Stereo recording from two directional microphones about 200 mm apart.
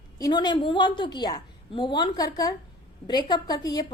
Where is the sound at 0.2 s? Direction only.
20° left (ahead or behind).